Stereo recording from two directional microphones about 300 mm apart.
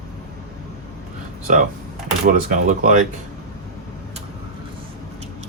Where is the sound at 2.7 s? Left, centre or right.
Right.